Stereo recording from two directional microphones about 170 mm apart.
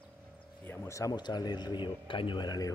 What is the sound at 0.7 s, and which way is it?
Speech, 15° left (ahead or behind).